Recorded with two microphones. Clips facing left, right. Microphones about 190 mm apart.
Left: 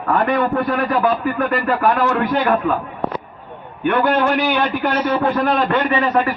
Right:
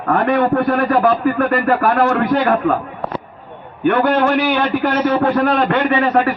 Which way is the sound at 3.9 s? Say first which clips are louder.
Right 2 dB; 45° right (ahead or behind).